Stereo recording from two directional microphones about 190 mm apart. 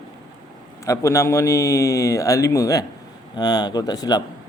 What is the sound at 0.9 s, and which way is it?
A man's voice, 15° left (ahead or behind).